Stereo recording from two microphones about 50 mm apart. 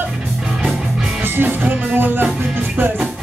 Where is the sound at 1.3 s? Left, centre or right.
Right.